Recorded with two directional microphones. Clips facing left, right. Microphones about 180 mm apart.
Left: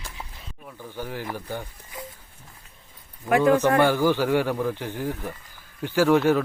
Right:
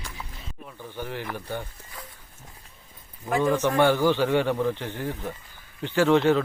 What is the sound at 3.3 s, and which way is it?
Speech, 65° left (ahead or behind).